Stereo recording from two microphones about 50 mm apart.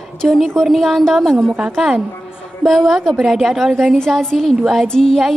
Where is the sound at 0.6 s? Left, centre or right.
Centre.